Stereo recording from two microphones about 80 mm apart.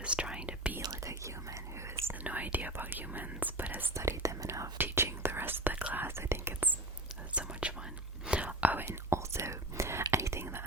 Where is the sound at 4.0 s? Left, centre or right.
Right.